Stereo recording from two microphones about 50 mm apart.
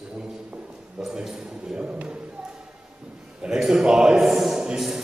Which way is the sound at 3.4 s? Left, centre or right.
Centre.